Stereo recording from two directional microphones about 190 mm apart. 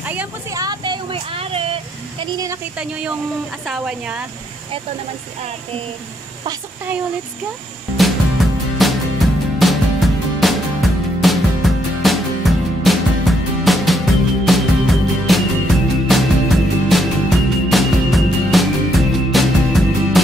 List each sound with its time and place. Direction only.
0.0 s speech: 10° right (ahead or behind)
0.6 s vehicle: 20° right (ahead or behind)
2.8 s speech: 5° right (ahead or behind)
8.0 s music: centre (ahead or behind)